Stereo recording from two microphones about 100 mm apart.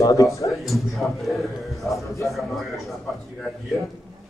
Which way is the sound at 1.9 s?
30° left (ahead or behind).